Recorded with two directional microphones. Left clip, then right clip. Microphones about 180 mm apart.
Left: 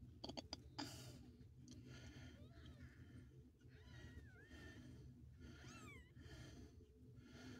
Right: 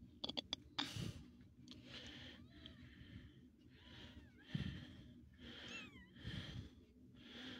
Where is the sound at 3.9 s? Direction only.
15° right (ahead or behind).